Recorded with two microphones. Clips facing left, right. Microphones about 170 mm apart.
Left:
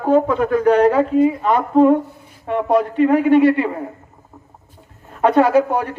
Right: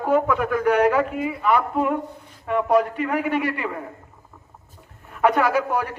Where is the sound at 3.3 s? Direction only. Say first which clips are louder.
Left 11 dB; 20° left (ahead or behind).